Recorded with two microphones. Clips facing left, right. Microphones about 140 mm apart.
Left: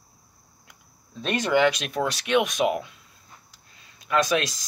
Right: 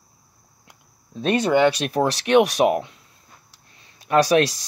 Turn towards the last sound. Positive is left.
turn(degrees=-30)  # may be behind; listen again after turning